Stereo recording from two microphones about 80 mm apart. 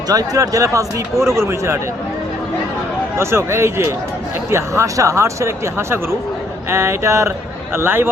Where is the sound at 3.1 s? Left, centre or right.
Right.